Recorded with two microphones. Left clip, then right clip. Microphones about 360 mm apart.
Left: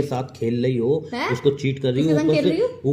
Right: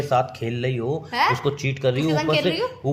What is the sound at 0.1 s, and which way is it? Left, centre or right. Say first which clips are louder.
A man's voice: right 4 dB; right.